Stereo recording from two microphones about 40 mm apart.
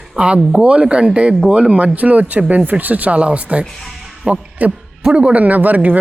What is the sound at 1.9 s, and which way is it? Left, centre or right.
Speech, right.